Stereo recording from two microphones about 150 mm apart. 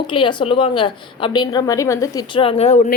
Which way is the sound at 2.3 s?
40° left (ahead or behind).